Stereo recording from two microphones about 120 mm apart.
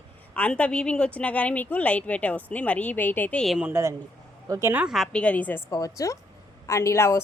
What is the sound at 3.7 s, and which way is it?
Speech, 25° right (ahead or behind).